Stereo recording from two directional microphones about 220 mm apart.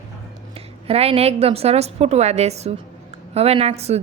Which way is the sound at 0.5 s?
25° right (ahead or behind).